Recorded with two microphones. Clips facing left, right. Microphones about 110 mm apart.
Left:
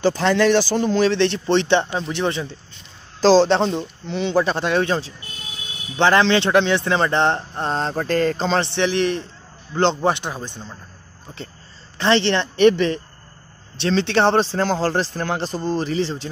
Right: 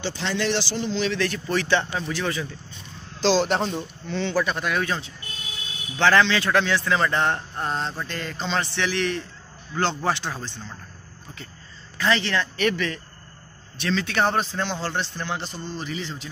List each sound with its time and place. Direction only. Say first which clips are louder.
0.0 s speech: left 10 dB; 50° left (ahead or behind)
1.1 s speech: left 7 dB; 25° left (ahead or behind)
3.2 s speech: left 7 dB; 35° left (ahead or behind)
7.9 s speech: left 12 dB; 45° left (ahead or behind)
8.6 s speech: left 6 dB; 20° left (ahead or behind)
12.0 s speech: left 5 dB; 30° left (ahead or behind)